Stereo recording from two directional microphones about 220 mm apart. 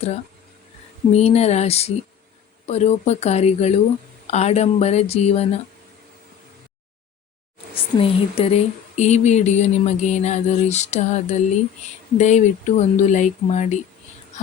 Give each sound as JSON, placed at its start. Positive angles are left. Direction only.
{"t": 1.1, "sound": "speech", "side_deg": 30}
{"t": 7.8, "sound": "speech", "side_deg": 25}